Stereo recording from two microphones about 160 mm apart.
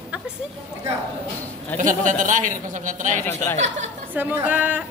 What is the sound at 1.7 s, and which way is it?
Speech, 50° right (ahead or behind).